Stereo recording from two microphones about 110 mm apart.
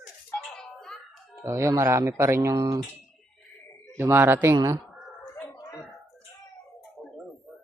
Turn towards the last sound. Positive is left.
turn(degrees=-5)  # may be behind; listen again after turning